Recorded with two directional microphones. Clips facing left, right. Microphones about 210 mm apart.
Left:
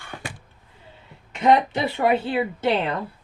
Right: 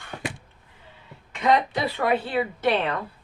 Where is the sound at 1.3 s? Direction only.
25° left (ahead or behind).